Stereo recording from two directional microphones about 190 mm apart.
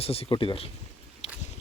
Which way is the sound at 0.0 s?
30° left (ahead or behind).